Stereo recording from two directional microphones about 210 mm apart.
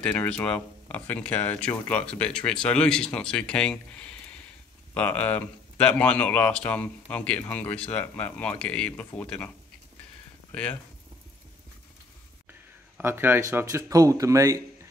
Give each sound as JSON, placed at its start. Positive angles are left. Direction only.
{"t": 0.0, "sound": "speech", "side_deg": 5}
{"t": 10.5, "sound": "speech", "side_deg": 5}
{"t": 12.4, "sound": "speech", "side_deg": -10}